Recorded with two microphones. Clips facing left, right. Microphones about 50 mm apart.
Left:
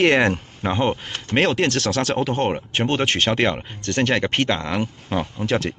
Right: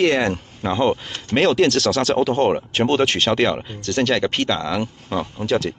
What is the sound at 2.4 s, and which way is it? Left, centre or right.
Speech, centre.